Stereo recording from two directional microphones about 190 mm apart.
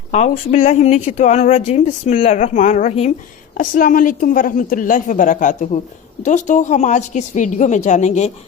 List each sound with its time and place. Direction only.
0.1 s a woman's voice: 40° left (ahead or behind)